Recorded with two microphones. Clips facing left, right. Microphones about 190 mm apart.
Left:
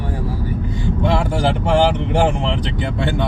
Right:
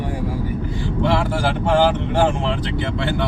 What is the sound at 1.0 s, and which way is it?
A man's voice, 15° left (ahead or behind).